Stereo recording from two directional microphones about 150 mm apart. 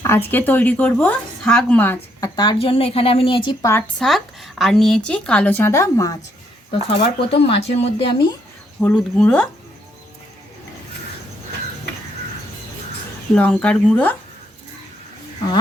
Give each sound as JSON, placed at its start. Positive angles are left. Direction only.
{"t": 0.0, "sound": "speech", "side_deg": 15}
{"t": 2.3, "sound": "speech", "side_deg": 30}
{"t": 3.6, "sound": "speech", "side_deg": 20}
{"t": 4.0, "sound": "speech", "side_deg": 0}
{"t": 6.7, "sound": "speech", "side_deg": 40}
{"t": 8.8, "sound": "speech", "side_deg": 0}
{"t": 13.3, "sound": "speech", "side_deg": 10}